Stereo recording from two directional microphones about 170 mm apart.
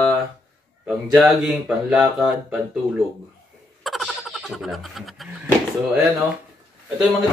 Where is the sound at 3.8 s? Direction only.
Centre (ahead or behind).